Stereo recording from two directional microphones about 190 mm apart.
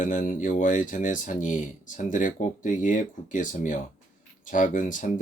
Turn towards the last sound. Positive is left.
turn(degrees=40)  # may be behind; listen again after turning